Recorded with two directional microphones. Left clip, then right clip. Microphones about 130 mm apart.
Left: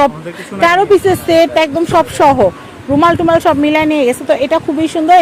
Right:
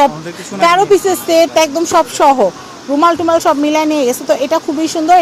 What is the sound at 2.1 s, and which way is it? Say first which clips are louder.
Speech: left 1 dB; 45° left (ahead or behind).